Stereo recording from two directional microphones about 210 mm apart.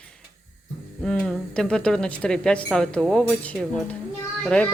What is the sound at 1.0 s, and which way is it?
A woman's voice, 5° left (ahead or behind).